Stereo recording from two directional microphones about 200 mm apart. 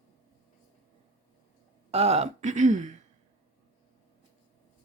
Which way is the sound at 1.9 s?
30° right (ahead or behind).